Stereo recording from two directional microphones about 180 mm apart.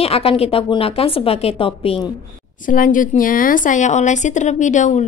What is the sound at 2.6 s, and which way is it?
A woman's voice, 45° left (ahead or behind).